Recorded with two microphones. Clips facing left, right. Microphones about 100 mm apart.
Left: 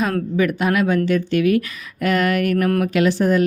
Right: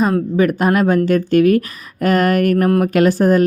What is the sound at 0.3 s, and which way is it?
A woman's voice, 40° right (ahead or behind).